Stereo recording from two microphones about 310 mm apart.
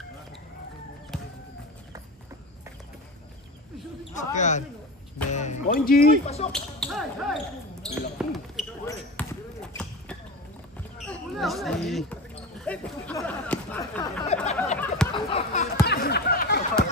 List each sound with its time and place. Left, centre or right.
1.1 s music: centre
4.1 s speech: left
6.5 s basketball bounce: centre
11.1 s speech: centre; by 14.6 s left
15.1 s a sound: centre